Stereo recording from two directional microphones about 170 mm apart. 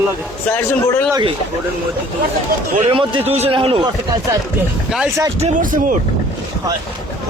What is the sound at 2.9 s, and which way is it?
Speech, 30° right (ahead or behind).